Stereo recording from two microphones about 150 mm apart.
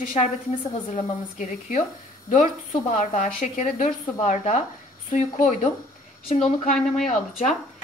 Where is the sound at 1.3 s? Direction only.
55° left (ahead or behind).